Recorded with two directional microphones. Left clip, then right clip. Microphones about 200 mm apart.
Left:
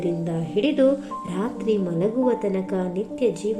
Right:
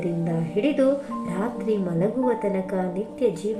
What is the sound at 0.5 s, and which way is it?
Speech, 45° left (ahead or behind).